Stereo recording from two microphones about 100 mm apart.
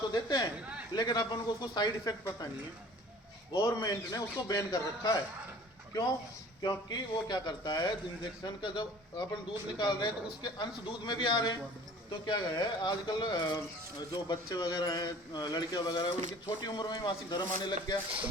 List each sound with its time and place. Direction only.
0.1 s speech: 45° left (ahead or behind)
3.5 s a man's voice: 40° left (ahead or behind)